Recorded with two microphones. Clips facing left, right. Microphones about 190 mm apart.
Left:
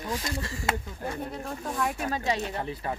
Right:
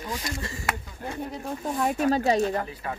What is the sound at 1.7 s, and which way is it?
Speech, 35° right (ahead or behind).